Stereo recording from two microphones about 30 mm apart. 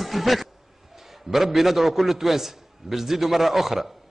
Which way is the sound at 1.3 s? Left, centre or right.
Centre.